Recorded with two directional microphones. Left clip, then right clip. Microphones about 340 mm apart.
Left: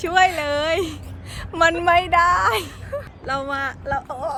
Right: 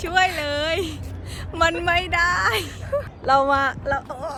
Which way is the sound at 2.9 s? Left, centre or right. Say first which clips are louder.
Right 8 dB; centre.